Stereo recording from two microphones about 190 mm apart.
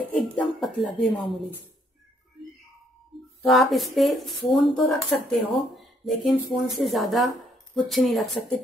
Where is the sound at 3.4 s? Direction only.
Centre (ahead or behind).